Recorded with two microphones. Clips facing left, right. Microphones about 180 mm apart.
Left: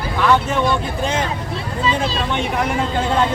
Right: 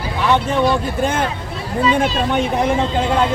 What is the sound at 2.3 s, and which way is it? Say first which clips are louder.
Speech: right 3 dB; 35° right (ahead or behind).